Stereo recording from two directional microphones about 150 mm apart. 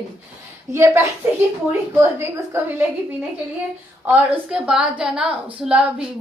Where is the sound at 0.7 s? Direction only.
20° right (ahead or behind).